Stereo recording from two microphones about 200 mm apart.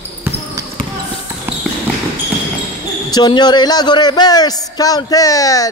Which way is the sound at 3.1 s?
20° left (ahead or behind).